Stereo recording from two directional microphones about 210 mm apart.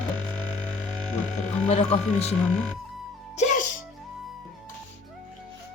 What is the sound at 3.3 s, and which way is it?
Music, 35° left (ahead or behind).